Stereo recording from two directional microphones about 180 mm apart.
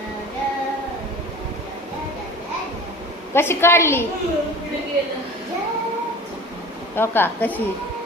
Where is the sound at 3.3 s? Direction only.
15° left (ahead or behind).